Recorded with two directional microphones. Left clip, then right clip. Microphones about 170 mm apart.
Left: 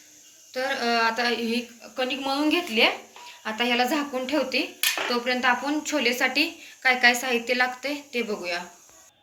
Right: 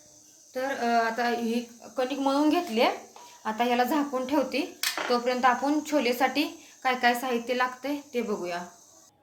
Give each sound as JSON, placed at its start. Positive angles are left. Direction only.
{"t": 0.5, "sound": "a woman's voice", "side_deg": -50}